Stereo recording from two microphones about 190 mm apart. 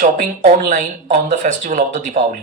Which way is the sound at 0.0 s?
40° right (ahead or behind).